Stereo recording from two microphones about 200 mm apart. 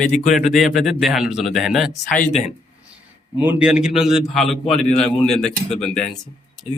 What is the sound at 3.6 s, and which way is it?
Speech, 5° right (ahead or behind).